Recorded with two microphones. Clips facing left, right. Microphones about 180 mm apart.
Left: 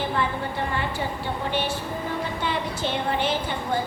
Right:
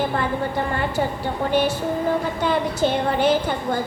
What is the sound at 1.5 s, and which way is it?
A woman's voice, 45° right (ahead or behind).